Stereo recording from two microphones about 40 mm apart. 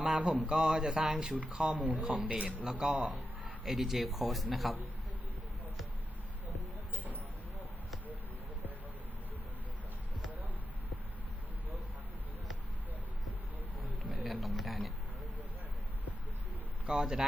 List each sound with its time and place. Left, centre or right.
0.0 s a man's voice: right
1.8 s speech: right
2.6 s a man's voice: centre
14.3 s a sound: centre
16.8 s speech: centre